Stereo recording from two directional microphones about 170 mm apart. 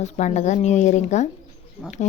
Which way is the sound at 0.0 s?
45° left (ahead or behind).